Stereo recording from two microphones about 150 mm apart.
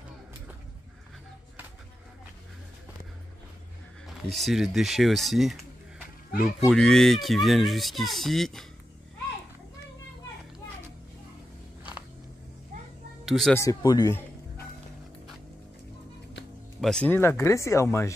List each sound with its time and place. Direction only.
4.3 s speech: centre (ahead or behind)
13.2 s speech: centre (ahead or behind)
13.6 s speech: 25° left (ahead or behind)
16.8 s speech: 5° left (ahead or behind)